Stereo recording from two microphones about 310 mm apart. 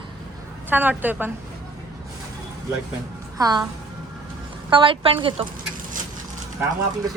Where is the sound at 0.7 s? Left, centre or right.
Centre.